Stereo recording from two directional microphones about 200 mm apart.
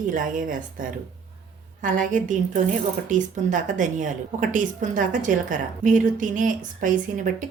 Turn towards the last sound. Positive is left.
turn(degrees=-40)  # may be behind; listen again after turning